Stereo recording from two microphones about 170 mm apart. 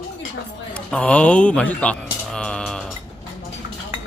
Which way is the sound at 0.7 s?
5° left (ahead or behind).